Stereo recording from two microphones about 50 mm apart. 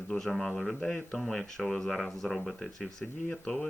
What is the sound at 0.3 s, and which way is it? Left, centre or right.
Speech, centre.